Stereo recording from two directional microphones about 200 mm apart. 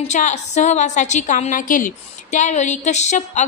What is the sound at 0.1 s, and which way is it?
A woman's voice, 35° left (ahead or behind).